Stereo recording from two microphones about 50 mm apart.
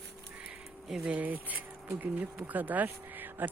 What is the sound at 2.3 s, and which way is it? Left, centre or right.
Speech, right.